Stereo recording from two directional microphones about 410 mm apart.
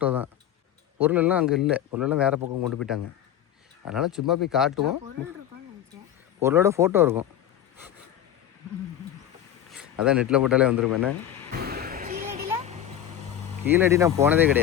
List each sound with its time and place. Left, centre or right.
0.0 s tick-tock: centre
0.9 s speech: centre
6.4 s speech: centre
9.7 s a man's voice: centre
11.5 s vehicle: right
13.7 s speech: centre